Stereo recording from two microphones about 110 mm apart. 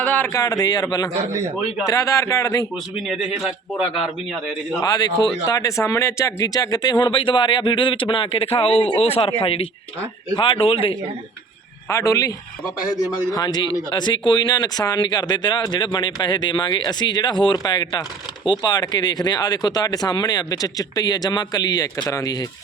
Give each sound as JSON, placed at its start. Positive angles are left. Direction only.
{"t": 0.0, "sound": "a sound", "side_deg": 15}
{"t": 0.3, "sound": "speech", "side_deg": 30}
{"t": 2.9, "sound": "speech", "side_deg": 0}
{"t": 4.8, "sound": "speech", "side_deg": 35}
{"t": 11.9, "sound": "speech", "side_deg": 30}